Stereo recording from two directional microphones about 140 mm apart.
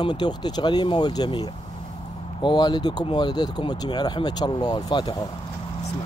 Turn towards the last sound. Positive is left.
turn(degrees=35)  # may be behind; listen again after turning